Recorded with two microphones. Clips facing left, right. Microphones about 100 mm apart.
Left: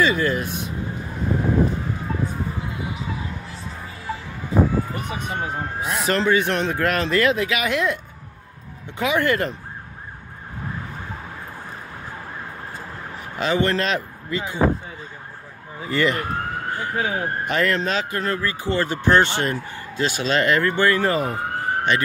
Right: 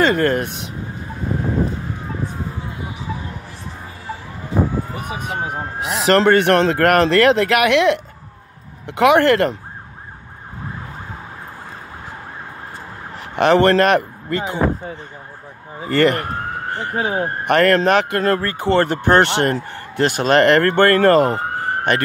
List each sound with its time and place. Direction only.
0.0 s speech: 60° right (ahead or behind)
5.4 s speech: 15° right (ahead or behind)
5.8 s speech: 85° right
13.1 s speech: 70° right (ahead or behind)
15.9 s speech: 60° right (ahead or behind)
16.9 s speech: 35° right (ahead or behind)
17.5 s speech: 60° right (ahead or behind); by 21.6 s 90° right
21.9 s speech: 55° right (ahead or behind)